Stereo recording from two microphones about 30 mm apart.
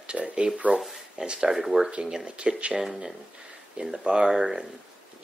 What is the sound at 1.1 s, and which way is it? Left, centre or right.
Speech, right.